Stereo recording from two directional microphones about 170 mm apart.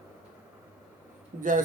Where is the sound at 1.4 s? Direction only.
50° right (ahead or behind).